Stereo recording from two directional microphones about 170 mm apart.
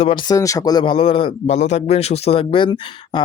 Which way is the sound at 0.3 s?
20° left (ahead or behind).